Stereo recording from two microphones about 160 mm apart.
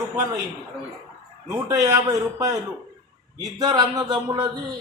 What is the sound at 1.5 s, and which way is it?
A man's voice, 20° right (ahead or behind).